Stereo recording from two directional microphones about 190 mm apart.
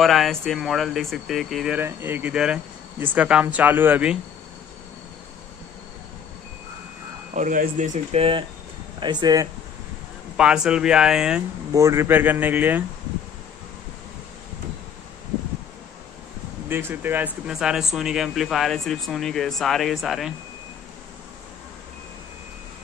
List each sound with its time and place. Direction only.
0.0 s speech: centre (ahead or behind)
7.3 s speech: 45° right (ahead or behind); by 9.5 s 20° right (ahead or behind)
10.3 s speech: 5° right (ahead or behind)
11.7 s speech: 15° right (ahead or behind)
16.6 s speech: 10° right (ahead or behind)